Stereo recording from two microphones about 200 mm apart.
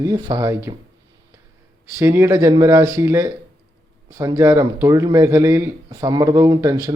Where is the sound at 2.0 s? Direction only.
15° right (ahead or behind).